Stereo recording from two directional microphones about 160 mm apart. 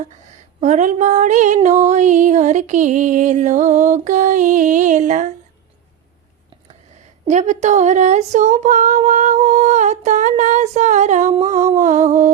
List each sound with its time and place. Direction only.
0.6 s female singing: 50° right (ahead or behind)
7.3 s female singing: 50° right (ahead or behind)